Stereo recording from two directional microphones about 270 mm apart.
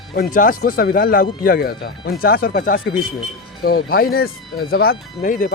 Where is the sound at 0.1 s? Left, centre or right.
Left.